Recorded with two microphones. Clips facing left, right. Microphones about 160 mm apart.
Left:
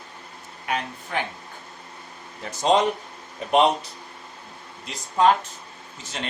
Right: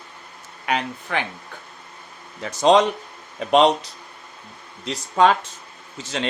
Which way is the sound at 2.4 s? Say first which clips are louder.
Right 5 dB; 90° right.